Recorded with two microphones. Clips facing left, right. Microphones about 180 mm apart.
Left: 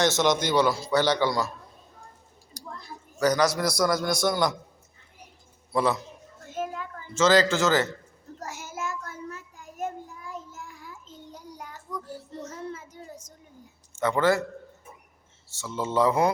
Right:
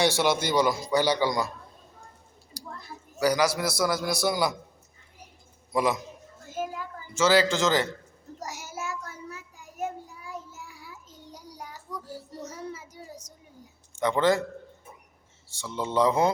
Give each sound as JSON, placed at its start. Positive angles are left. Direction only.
{"t": 0.0, "sound": "a man's voice", "side_deg": -10}
{"t": 3.2, "sound": "a man's voice", "side_deg": -10}
{"t": 5.7, "sound": "a man's voice", "side_deg": -15}
{"t": 8.4, "sound": "child singing", "side_deg": -10}
{"t": 13.9, "sound": "speech", "side_deg": -15}
{"t": 15.4, "sound": "a man's voice", "side_deg": -15}